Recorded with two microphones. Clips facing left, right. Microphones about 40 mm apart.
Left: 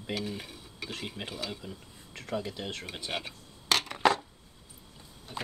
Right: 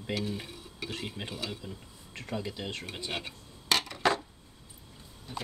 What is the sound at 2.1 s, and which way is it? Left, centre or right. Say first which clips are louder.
Speech: left 2 dB; centre.